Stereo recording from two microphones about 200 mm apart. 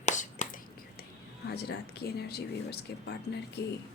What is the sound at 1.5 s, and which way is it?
Speech, 55° left (ahead or behind).